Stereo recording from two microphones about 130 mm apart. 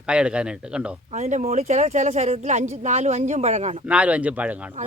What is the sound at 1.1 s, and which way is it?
Speech, 65° right (ahead or behind).